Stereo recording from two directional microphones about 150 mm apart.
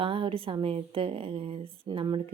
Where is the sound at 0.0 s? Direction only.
40° right (ahead or behind).